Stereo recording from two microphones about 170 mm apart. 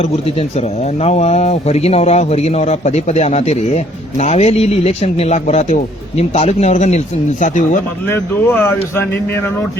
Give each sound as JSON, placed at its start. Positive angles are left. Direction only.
{"t": 1.0, "sound": "a man's voice", "side_deg": 40}
{"t": 8.1, "sound": "speech", "side_deg": 15}